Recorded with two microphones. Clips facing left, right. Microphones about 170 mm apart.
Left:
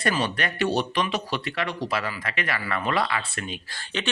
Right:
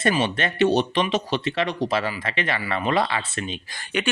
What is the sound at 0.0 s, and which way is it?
Speech, 20° right (ahead or behind).